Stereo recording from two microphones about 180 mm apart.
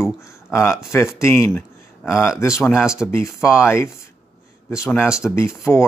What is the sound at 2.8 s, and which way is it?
Speech, 5° right (ahead or behind).